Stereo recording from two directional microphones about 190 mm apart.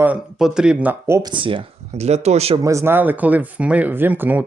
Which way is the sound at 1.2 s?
25° right (ahead or behind).